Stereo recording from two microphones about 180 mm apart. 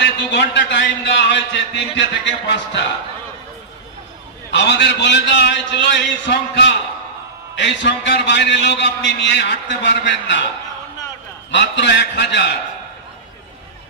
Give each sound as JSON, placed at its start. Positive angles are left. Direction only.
{"t": 0.0, "sound": "a man's voice", "side_deg": 75}
{"t": 4.5, "sound": "a man's voice", "side_deg": 75}
{"t": 11.5, "sound": "a man's voice", "side_deg": 85}